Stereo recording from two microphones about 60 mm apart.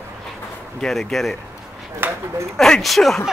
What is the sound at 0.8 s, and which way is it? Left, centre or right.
Speech, centre.